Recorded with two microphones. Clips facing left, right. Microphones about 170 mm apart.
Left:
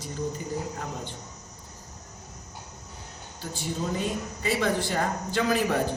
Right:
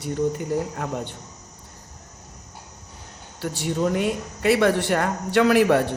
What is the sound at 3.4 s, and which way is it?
A woman's voice, 75° right (ahead or behind).